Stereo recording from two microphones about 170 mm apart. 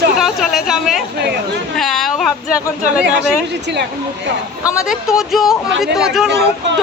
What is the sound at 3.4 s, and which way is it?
Speech, 90° right.